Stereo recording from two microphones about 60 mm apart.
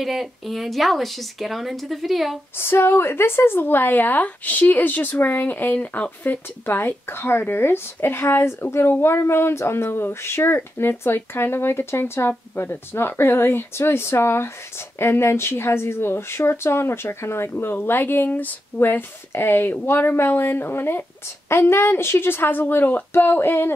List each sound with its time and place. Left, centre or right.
0.0 s a woman's voice: centre
2.5 s speech: left
6.6 s speech: left